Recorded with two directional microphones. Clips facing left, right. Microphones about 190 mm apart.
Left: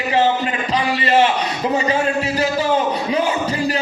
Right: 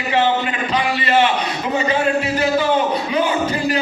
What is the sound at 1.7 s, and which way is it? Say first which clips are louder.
Music: right 1 dB; 35° left (ahead or behind).